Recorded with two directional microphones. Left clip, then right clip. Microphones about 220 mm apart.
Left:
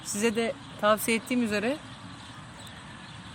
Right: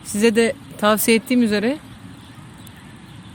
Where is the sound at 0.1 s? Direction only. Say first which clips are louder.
Right 11 dB; 40° right (ahead or behind).